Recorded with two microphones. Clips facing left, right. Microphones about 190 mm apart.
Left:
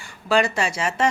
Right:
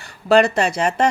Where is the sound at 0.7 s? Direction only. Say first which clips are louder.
Right 6 dB; 60° right (ahead or behind).